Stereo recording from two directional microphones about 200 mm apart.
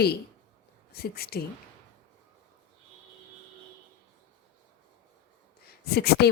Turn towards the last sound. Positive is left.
turn(degrees=55)  # may be behind; listen again after turning